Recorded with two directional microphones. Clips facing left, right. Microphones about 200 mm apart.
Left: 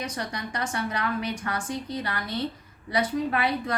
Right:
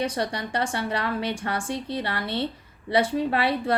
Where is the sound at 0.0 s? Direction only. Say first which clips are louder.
Right 6 dB; 30° right (ahead or behind).